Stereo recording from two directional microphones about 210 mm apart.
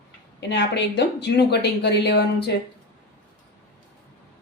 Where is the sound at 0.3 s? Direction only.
55° left (ahead or behind).